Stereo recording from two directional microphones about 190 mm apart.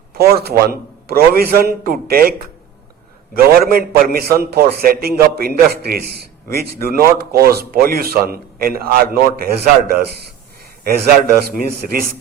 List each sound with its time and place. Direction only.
0.1 s a man's voice: 55° right (ahead or behind)
3.3 s a man's voice: 50° right (ahead or behind)